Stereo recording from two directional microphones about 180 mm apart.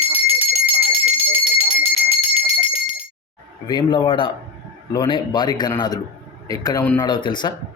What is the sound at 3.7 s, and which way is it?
A man's voice, 25° left (ahead or behind).